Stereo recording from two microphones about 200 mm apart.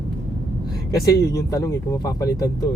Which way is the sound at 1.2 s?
15° left (ahead or behind).